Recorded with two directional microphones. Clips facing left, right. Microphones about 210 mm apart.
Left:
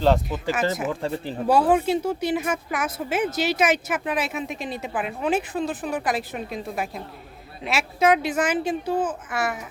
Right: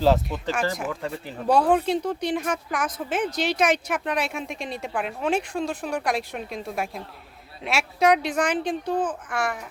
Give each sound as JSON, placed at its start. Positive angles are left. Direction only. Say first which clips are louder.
{"t": 0.0, "sound": "speech", "louder": "even", "side_deg": 0}
{"t": 0.9, "sound": "speech", "louder": "left 4 dB", "side_deg": 30}
{"t": 1.5, "sound": "speech", "louder": "left 1 dB", "side_deg": 5}